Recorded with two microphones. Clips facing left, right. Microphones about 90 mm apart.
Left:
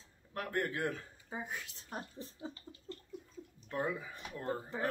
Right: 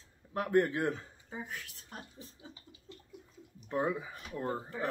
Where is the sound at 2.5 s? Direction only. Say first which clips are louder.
Left 5 dB; 10° right (ahead or behind).